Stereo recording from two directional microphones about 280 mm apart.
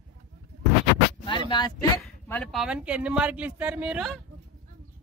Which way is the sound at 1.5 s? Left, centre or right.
Centre.